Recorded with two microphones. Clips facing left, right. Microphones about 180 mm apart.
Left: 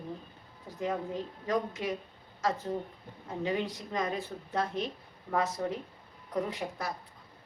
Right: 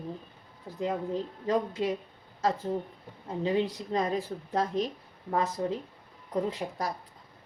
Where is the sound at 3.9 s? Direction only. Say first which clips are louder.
Right 4 dB; 35° right (ahead or behind).